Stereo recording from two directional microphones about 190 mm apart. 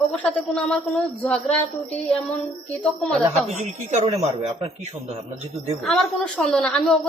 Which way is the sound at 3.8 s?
35° right (ahead or behind).